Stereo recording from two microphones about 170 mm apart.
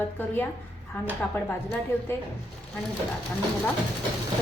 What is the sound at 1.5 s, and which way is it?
Speech, 15° left (ahead or behind).